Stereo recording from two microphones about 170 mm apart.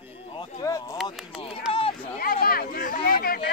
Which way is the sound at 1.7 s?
30° left (ahead or behind).